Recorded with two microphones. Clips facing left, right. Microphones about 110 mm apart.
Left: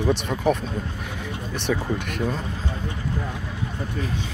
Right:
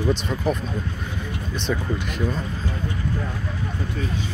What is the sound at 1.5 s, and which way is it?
Speech, 65° left (ahead or behind).